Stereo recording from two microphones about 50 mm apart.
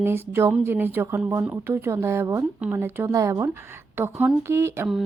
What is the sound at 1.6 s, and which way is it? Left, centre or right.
Speech, right.